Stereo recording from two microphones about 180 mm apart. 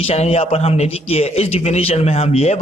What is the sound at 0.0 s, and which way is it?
A man's voice, 35° left (ahead or behind).